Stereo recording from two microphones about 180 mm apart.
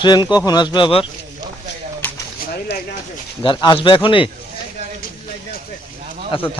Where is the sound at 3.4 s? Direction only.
25° left (ahead or behind).